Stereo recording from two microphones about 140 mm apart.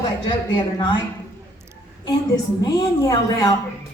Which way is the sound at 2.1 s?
25° left (ahead or behind).